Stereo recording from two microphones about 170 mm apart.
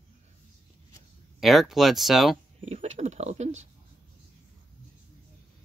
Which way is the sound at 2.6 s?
40° right (ahead or behind).